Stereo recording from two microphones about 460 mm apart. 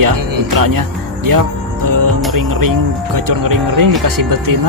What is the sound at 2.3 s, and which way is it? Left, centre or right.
Speech, right.